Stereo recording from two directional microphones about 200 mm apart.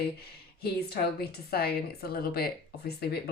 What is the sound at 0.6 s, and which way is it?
A woman's voice, 50° left (ahead or behind).